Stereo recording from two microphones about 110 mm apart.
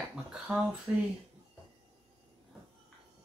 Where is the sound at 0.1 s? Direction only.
10° right (ahead or behind).